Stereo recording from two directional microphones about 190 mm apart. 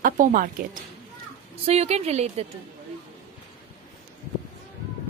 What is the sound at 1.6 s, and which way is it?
Speech, 35° right (ahead or behind).